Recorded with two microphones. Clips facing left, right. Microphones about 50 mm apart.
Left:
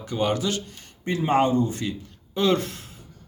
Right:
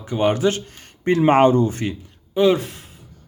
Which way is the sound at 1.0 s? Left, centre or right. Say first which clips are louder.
Right 7 dB; right.